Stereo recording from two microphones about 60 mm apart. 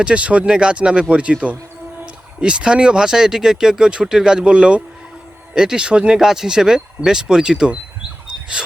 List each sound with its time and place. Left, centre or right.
0.0 s speech: right